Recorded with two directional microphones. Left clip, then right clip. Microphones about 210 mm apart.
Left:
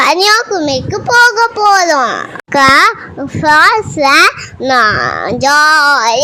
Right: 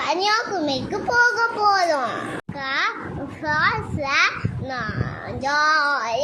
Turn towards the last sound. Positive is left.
turn(degrees=45)  # may be behind; listen again after turning